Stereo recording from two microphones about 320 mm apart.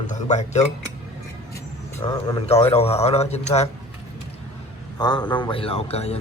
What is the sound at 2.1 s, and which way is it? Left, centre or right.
Speech, centre.